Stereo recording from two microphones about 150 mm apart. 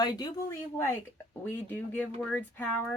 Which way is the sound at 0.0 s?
25° left (ahead or behind).